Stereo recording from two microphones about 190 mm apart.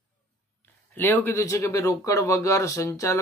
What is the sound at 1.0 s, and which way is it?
Speech, 10° left (ahead or behind).